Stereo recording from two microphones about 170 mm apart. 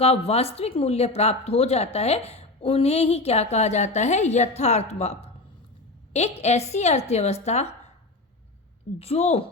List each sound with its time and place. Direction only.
0.0 s speech: 35° left (ahead or behind)
9.0 s speech: 40° left (ahead or behind)